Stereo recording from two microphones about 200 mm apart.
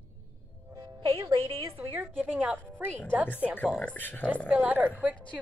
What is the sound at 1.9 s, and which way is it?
A woman's voice, 10° right (ahead or behind).